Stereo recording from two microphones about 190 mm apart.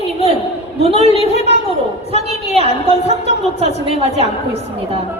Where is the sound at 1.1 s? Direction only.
30° left (ahead or behind).